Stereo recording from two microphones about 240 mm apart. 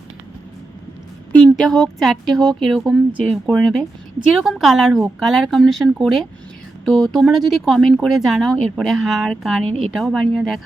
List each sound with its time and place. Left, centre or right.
1.3 s speech: centre